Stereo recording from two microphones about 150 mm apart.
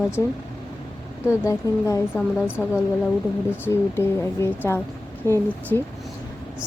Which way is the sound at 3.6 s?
15° left (ahead or behind).